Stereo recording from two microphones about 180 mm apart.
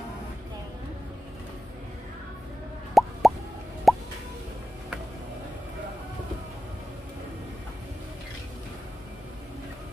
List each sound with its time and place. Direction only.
2.9 s plop: centre (ahead or behind)